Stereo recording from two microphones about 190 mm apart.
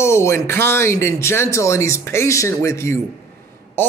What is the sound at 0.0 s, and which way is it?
A man's voice, 15° left (ahead or behind).